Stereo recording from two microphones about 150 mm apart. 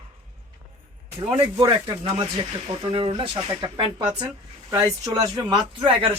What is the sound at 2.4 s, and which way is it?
Speech, 35° right (ahead or behind).